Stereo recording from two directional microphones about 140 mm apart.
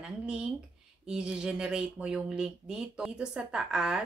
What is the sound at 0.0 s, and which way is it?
Speech, 5° right (ahead or behind).